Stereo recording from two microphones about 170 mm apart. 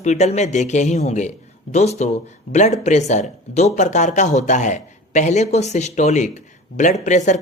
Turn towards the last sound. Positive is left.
turn(degrees=45)  # may be behind; listen again after turning